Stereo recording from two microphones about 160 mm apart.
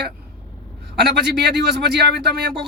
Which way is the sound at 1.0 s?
90° right.